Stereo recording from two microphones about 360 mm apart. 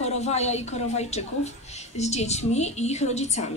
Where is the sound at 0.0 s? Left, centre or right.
Centre.